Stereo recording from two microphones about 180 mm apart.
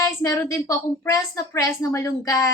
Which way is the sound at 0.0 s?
15° left (ahead or behind).